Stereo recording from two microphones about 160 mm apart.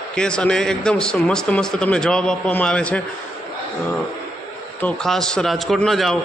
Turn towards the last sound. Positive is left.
turn(degrees=0)  # may be behind; listen again after turning